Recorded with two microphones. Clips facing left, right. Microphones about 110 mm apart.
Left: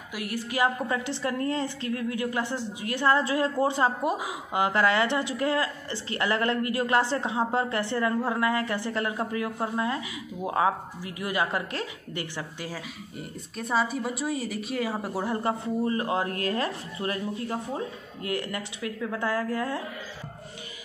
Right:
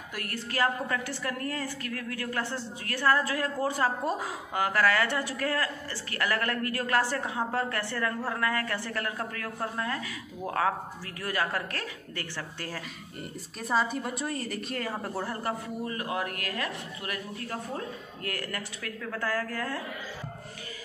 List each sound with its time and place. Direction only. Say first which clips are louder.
0.1 s a woman's voice: left 4 dB; 10° left (ahead or behind)
13.6 s a woman's voice: left 1 dB; centre (ahead or behind); by 19.8 s 20° left (ahead or behind)